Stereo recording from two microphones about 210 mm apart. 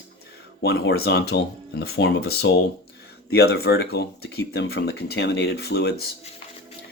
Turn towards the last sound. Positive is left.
turn(degrees=50)  # may be behind; listen again after turning